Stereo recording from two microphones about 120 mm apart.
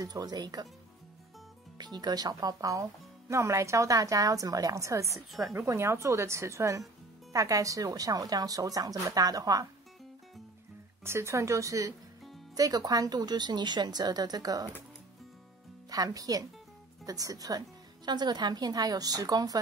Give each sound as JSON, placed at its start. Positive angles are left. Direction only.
{"t": 0.0, "sound": "a woman's voice", "side_deg": -35}
{"t": 1.8, "sound": "speech", "side_deg": -35}
{"t": 11.1, "sound": "a woman's voice", "side_deg": -20}
{"t": 15.9, "sound": "a woman's voice", "side_deg": -30}